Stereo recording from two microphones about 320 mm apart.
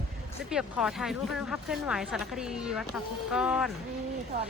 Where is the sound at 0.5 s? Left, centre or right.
Centre.